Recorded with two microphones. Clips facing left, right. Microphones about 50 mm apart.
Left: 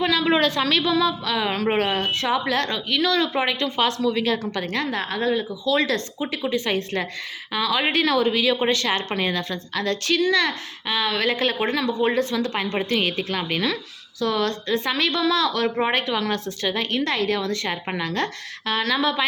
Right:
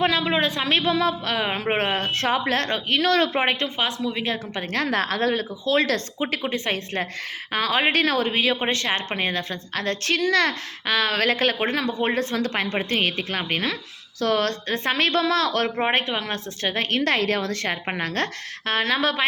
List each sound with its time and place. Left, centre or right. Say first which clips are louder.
0.0 s a woman's voice: even; right
0.3 s speech: left 3 dB; centre
0.7 s a woman's voice: left 1 dB; right
1.5 s a woman's voice: left 3 dB; right
2.1 s a woman's voice: even; right
3.8 s speech: left 4 dB; centre
4.2 s speech: left 4 dB; right
4.9 s a woman's voice: right 3 dB; right
5.6 s a woman's voice: right 1 dB; right
10.3 s a child's voice: right 1 dB; right
11.6 s a woman's voice: left 2 dB; right
15.7 s a woman's voice: left 1 dB; right